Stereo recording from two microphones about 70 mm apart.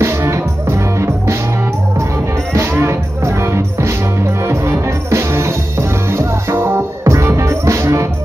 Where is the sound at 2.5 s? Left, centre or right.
Right.